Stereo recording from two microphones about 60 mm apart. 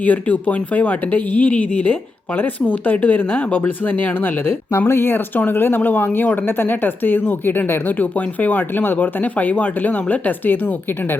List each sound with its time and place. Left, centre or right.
0.0 s speech: left